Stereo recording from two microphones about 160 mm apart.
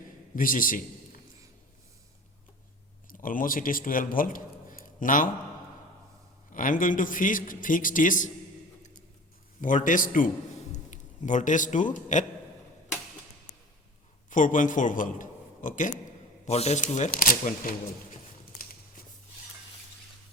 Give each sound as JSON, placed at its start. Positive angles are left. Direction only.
{"t": 0.3, "sound": "a man's voice", "side_deg": 60}
{"t": 3.1, "sound": "a man's voice", "side_deg": 60}
{"t": 6.5, "sound": "a man's voice", "side_deg": 55}
{"t": 9.6, "sound": "a man's voice", "side_deg": 55}
{"t": 14.3, "sound": "a man's voice", "side_deg": 55}
{"t": 16.5, "sound": "speech", "side_deg": 45}
{"t": 17.2, "sound": "a man's voice", "side_deg": 60}